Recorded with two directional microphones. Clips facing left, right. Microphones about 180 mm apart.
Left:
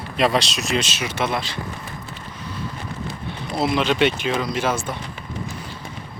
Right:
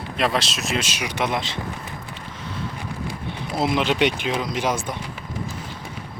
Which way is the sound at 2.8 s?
10° right (ahead or behind).